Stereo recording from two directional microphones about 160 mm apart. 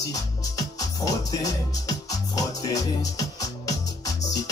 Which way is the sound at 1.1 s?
20° left (ahead or behind).